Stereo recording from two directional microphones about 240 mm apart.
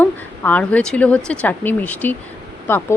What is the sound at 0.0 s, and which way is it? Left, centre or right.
Speech, centre.